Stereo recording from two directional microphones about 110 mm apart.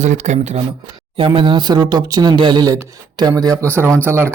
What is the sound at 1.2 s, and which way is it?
Speech, 50° right (ahead or behind).